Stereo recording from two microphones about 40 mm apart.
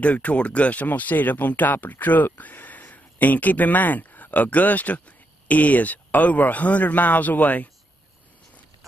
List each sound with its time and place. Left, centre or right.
0.0 s speech: left